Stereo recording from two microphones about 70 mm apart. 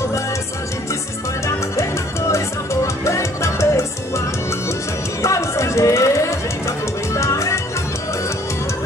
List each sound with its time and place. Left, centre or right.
1.8 s music: left
5.2 s music: left
7.2 s music: left